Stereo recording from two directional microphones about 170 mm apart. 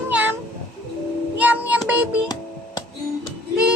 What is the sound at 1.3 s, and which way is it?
Child singing, 10° right (ahead or behind).